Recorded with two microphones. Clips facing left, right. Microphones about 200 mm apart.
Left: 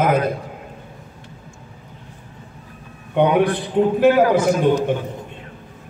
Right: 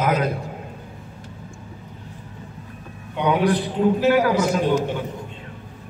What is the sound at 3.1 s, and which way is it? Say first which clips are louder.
Speech: left 3 dB; 55° left (ahead or behind).